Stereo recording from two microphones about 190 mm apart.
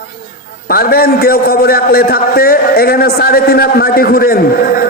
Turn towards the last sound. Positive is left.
turn(degrees=50)  # may be behind; listen again after turning